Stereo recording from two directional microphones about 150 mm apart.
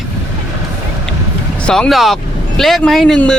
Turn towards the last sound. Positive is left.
turn(degrees=5)  # may be behind; listen again after turning